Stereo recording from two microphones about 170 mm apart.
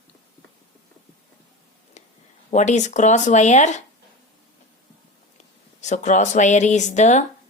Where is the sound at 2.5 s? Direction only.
45° left (ahead or behind).